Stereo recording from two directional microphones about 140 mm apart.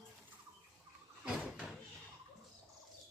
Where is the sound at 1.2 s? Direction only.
5° right (ahead or behind).